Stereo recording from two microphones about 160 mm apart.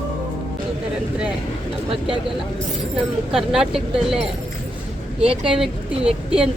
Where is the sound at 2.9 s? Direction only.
Centre (ahead or behind).